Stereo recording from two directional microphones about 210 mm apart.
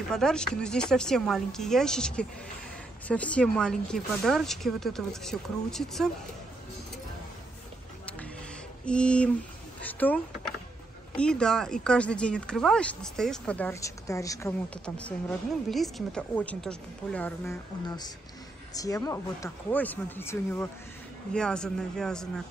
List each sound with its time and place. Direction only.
0.1 s speech: 5° left (ahead or behind)
8.8 s speech: 5° left (ahead or behind)
17.8 s speech: 20° left (ahead or behind); by 22.3 s 5° left (ahead or behind)